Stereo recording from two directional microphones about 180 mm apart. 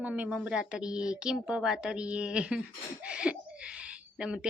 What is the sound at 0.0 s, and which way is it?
Speech, 5° right (ahead or behind).